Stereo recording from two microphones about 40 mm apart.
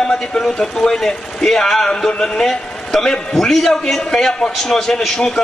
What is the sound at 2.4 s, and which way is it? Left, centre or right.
A man's voice, centre.